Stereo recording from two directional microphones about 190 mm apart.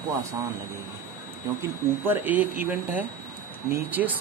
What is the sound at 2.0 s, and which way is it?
Speech, 10° right (ahead or behind).